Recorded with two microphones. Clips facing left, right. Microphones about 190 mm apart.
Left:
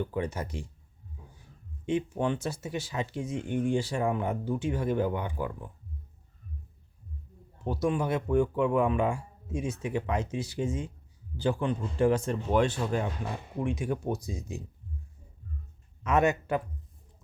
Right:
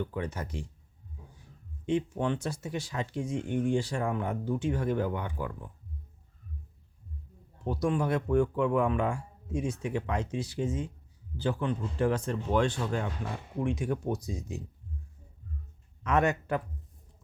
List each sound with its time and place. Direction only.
0.0 s speech: 10° left (ahead or behind)
1.9 s speech: 10° left (ahead or behind)
7.6 s speech: 5° left (ahead or behind)
16.0 s speech: 10° left (ahead or behind)